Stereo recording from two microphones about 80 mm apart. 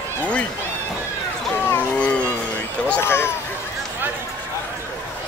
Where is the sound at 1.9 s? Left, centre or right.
Centre.